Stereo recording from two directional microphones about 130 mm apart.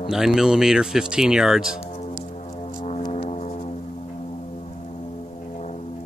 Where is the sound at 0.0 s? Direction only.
Centre (ahead or behind).